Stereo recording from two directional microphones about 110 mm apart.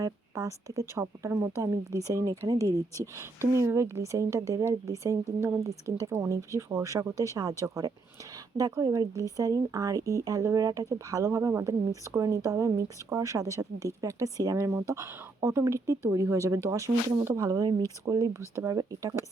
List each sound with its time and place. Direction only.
0.0 s speech: 30° right (ahead or behind)
18.0 s speech: 30° right (ahead or behind)